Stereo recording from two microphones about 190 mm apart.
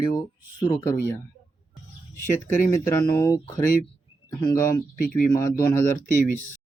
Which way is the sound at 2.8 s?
15° left (ahead or behind).